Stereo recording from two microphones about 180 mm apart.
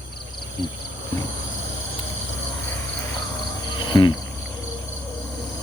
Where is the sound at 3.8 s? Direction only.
25° left (ahead or behind).